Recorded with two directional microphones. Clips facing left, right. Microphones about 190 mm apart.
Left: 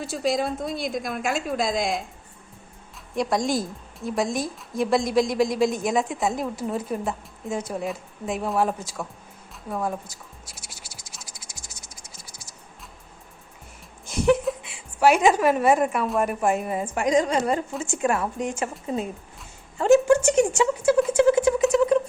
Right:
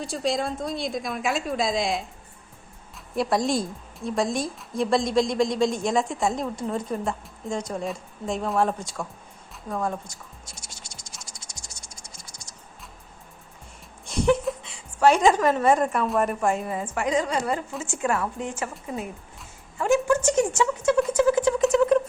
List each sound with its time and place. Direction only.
0.0 s a woman's voice: centre (ahead or behind)
3.2 s a woman's voice: centre (ahead or behind)
10.8 s scratch: 5° left (ahead or behind)
11.3 s music: 5° left (ahead or behind)
14.0 s a sound: centre (ahead or behind)
14.9 s a woman's voice: 10° left (ahead or behind)
16.5 s a woman's voice: 20° left (ahead or behind)
20.1 s a woman's voice: 10° left (ahead or behind)
20.8 s music: 10° left (ahead or behind)